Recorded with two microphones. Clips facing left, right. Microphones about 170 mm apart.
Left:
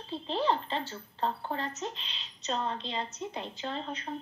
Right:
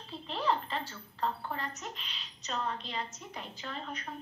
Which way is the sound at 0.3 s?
30° left (ahead or behind).